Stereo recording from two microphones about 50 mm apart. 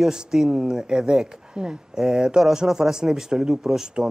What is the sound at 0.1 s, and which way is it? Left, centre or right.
Speech, centre.